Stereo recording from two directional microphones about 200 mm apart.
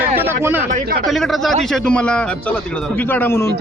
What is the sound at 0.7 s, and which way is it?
Speech, 45° right (ahead or behind).